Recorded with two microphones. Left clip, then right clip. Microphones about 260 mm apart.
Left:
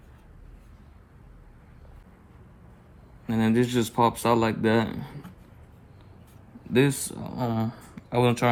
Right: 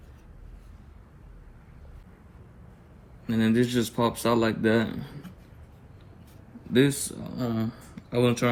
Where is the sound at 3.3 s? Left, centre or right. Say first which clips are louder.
Even; left.